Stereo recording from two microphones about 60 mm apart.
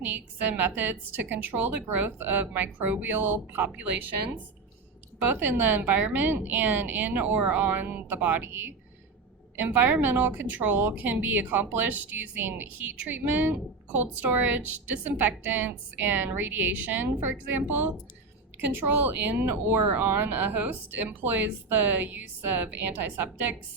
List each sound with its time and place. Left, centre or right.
0.0 s a woman's voice: right
5.2 s a woman's voice: right